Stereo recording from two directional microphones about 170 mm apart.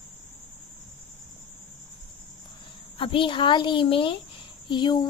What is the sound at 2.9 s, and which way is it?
Speech, 30° left (ahead or behind).